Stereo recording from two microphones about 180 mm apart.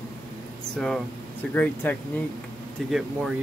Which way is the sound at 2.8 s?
Centre (ahead or behind).